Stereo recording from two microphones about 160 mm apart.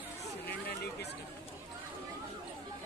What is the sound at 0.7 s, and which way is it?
Chatter, 90° left.